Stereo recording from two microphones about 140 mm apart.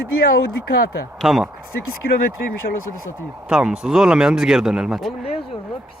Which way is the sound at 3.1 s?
5° right (ahead or behind).